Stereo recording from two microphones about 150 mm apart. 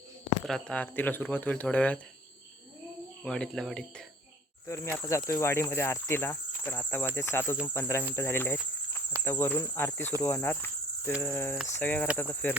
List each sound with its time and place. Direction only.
0.4 s speech: 5° left (ahead or behind)
3.2 s speech: 5° left (ahead or behind)
4.6 s speech: 20° left (ahead or behind)
10.2 s cricket: 15° left (ahead or behind)
11.2 s speech: 15° left (ahead or behind)